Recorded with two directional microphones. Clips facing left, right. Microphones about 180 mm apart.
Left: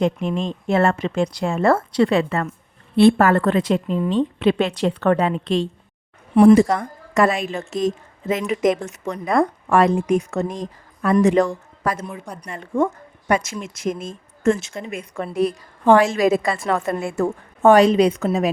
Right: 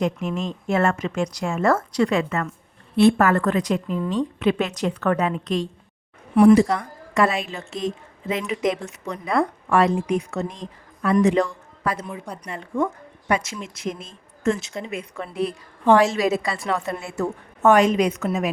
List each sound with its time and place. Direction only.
0.0 s a woman's voice: 30° left (ahead or behind)
6.5 s a woman's voice: 45° left (ahead or behind)
12.1 s speech: 5° right (ahead or behind)
12.5 s a woman's voice: 50° left (ahead or behind)
17.6 s a woman's voice: 35° left (ahead or behind)